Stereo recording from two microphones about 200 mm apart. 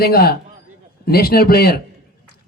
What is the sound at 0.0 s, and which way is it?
Speech, 50° left (ahead or behind).